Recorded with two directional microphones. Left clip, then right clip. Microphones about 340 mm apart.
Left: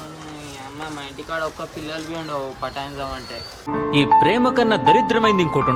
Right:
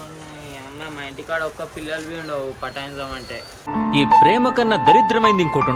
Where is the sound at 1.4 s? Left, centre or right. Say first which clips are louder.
Even; centre.